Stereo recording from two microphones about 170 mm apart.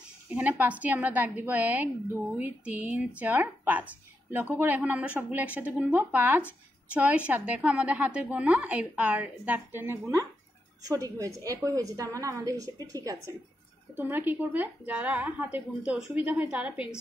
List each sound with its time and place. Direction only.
0.3 s a woman's voice: 10° right (ahead or behind)